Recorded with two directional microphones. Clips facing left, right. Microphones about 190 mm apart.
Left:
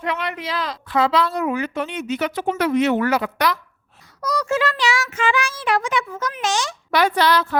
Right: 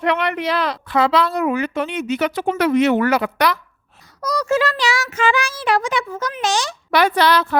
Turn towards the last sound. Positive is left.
turn(degrees=-70)  # may be behind; listen again after turning